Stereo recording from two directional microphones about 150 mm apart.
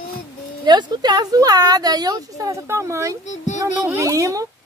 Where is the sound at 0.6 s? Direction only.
30° right (ahead or behind).